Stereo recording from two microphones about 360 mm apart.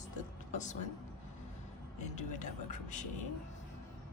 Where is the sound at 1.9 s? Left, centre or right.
Centre.